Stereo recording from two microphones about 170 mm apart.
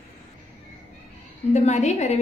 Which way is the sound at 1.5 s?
40° left (ahead or behind).